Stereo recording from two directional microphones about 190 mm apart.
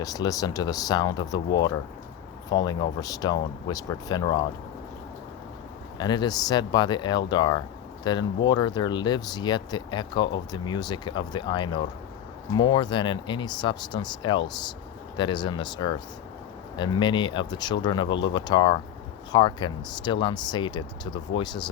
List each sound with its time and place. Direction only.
0.0 s speech: 20° left (ahead or behind)
6.0 s speech: 20° left (ahead or behind)